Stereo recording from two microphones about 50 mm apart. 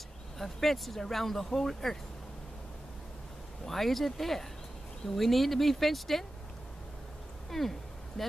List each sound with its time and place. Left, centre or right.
0.4 s speech: centre
3.6 s speech: centre
7.5 s speech: centre